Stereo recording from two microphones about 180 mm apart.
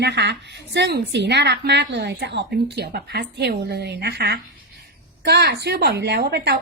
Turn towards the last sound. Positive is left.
turn(degrees=-65)  # may be behind; listen again after turning